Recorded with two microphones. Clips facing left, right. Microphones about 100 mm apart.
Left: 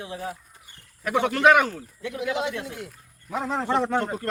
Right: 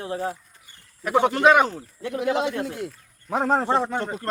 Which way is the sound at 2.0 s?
40° right (ahead or behind).